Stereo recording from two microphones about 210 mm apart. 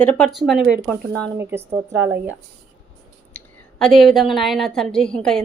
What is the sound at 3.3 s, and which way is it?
A woman's voice, centre (ahead or behind).